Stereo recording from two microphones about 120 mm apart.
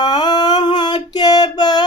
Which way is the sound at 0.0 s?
35° left (ahead or behind).